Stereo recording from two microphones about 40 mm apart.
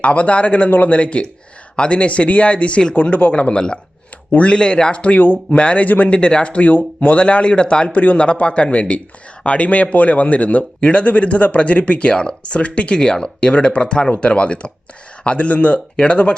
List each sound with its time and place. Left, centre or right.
0.0 s a man's voice: left
6.1 s a man's voice: left